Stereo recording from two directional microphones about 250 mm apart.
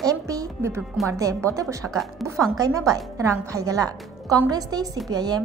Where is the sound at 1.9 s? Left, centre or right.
Centre.